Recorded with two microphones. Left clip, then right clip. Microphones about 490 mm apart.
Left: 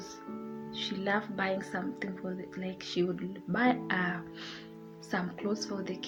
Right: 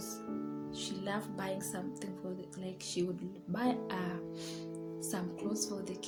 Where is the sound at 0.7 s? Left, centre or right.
Right.